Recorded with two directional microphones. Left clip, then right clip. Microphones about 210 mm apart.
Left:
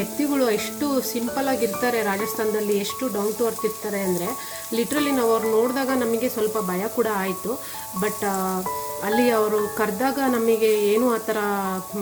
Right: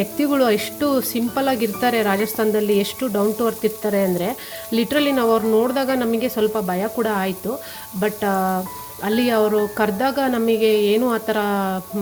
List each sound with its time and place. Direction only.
0.2 s speech: 30° right (ahead or behind)
4.7 s speech: 30° right (ahead or behind)